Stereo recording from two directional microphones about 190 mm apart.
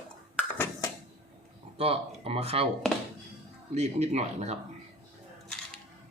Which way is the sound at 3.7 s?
35° right (ahead or behind).